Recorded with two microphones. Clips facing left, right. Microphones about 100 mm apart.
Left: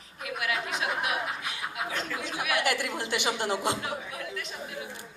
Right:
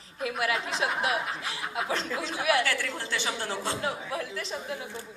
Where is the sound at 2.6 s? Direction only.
15° left (ahead or behind).